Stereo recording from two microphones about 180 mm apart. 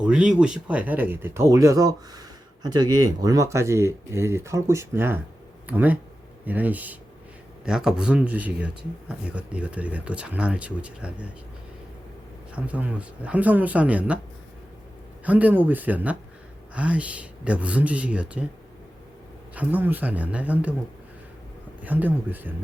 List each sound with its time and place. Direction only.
0.0 s speech: 5° right (ahead or behind)
12.5 s speech: 5° right (ahead or behind)
15.2 s speech: 10° right (ahead or behind)
19.5 s speech: 10° right (ahead or behind)
21.8 s speech: 10° right (ahead or behind)